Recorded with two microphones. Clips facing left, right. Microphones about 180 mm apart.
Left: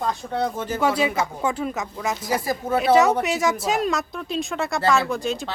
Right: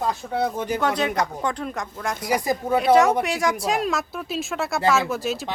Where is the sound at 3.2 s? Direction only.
Centre (ahead or behind).